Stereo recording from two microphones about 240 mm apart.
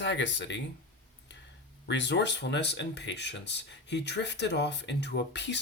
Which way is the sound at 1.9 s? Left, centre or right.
Left.